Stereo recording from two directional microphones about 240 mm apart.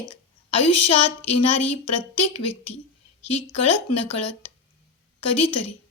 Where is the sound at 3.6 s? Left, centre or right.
Left.